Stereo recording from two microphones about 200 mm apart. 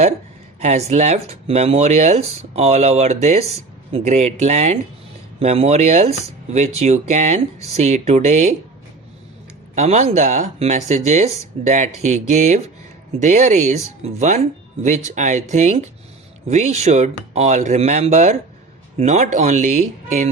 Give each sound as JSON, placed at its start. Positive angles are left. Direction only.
{"t": 0.6, "sound": "speech", "side_deg": -35}
{"t": 9.7, "sound": "speech", "side_deg": -35}